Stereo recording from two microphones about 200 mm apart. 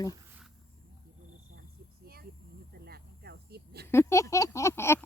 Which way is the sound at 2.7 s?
50° right (ahead or behind).